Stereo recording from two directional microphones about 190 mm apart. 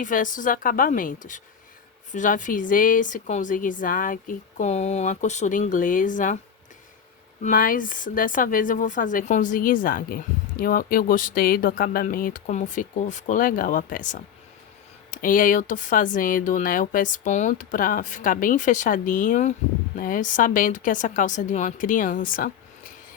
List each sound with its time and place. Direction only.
0.0 s speech: 45° left (ahead or behind)
7.4 s speech: 45° left (ahead or behind)